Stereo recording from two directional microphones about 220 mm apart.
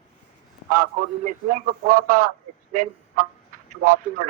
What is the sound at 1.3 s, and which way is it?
Speech, 40° right (ahead or behind).